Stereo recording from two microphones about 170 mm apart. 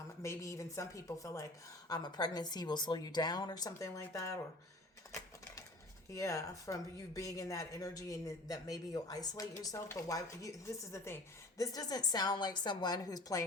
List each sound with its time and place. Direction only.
0.2 s speech: 15° left (ahead or behind)
6.1 s speech: 20° left (ahead or behind)